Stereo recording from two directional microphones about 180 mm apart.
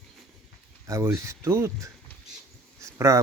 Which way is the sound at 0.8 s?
15° right (ahead or behind).